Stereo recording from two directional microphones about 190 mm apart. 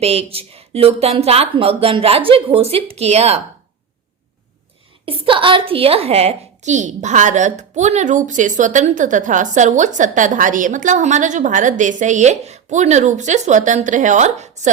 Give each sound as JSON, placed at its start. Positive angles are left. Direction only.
{"t": 0.0, "sound": "a woman's voice", "side_deg": -30}
{"t": 5.0, "sound": "a woman's voice", "side_deg": -30}